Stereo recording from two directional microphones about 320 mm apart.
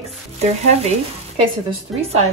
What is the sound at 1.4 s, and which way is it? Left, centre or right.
Speech, centre.